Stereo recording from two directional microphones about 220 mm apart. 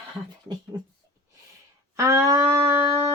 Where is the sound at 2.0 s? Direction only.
15° right (ahead or behind).